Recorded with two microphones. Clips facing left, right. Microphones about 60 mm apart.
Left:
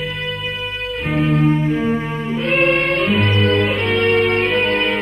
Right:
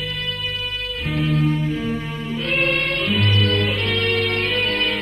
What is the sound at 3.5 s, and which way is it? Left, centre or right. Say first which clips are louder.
Music: left 5 dB; centre.